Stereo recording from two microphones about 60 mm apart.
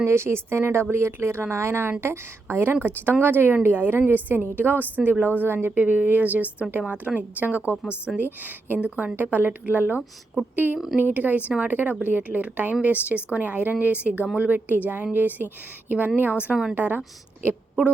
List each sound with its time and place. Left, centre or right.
0.0 s a woman's voice: right